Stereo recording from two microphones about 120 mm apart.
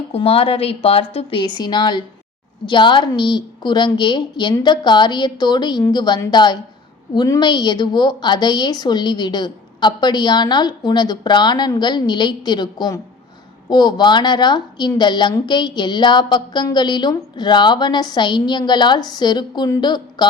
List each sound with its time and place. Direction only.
0.1 s a woman's voice: 55° left (ahead or behind); by 20.2 s 35° left (ahead or behind)